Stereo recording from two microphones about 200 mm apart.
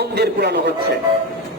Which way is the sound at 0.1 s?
55° right (ahead or behind).